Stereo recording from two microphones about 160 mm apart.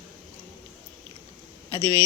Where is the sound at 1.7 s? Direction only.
20° left (ahead or behind).